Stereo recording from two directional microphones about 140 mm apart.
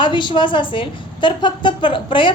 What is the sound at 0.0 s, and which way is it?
A woman's voice, 35° left (ahead or behind).